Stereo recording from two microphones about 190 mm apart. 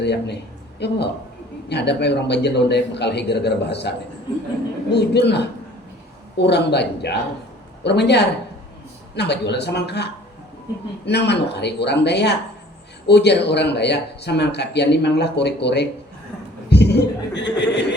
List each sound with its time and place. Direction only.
0.0 s a man's voice: 60° left (ahead or behind)